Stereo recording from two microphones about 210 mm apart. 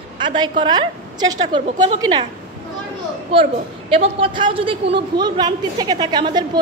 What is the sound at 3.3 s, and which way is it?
A woman's voice, 25° right (ahead or behind).